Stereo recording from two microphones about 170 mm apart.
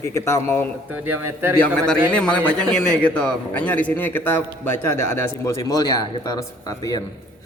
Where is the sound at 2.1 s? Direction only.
5° left (ahead or behind).